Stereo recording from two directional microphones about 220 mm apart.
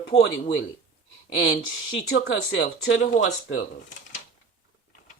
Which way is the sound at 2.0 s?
65° left (ahead or behind).